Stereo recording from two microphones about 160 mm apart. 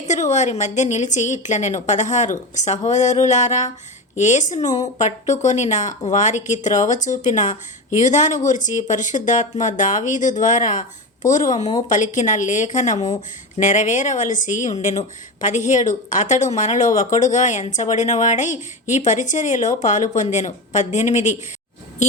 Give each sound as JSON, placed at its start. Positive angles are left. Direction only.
{"t": 0.1, "sound": "speech", "side_deg": 50}